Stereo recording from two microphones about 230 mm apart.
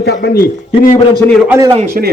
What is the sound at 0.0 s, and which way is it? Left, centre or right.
Speech, left.